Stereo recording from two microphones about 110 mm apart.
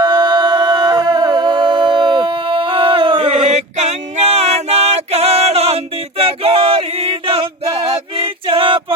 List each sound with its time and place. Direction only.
0.0 s music: 40° right (ahead or behind); by 9.0 s 55° right (ahead or behind)